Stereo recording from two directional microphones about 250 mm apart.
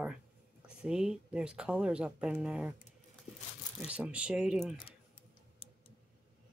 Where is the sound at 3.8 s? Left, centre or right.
Centre.